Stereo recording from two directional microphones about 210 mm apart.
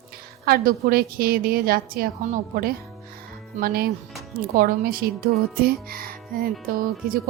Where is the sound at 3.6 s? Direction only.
45° right (ahead or behind).